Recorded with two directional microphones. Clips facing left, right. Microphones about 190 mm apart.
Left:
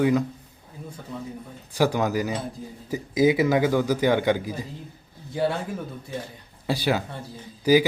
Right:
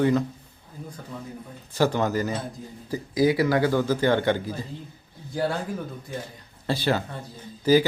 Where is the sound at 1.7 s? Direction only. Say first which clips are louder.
Even; 15° left (ahead or behind).